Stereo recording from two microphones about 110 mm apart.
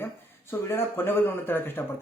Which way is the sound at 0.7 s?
20° left (ahead or behind).